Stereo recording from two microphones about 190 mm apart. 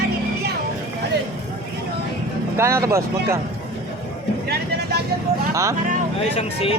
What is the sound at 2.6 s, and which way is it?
Speech, 15° right (ahead or behind).